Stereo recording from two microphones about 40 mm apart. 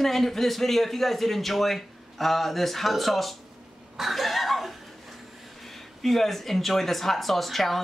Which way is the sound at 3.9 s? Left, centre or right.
Centre.